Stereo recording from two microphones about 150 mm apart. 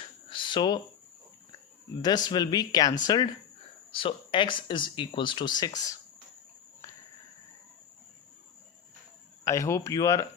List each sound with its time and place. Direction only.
0.3 s a sound: 30° left (ahead or behind)
2.0 s speech: 25° left (ahead or behind)
9.4 s speech: 20° left (ahead or behind)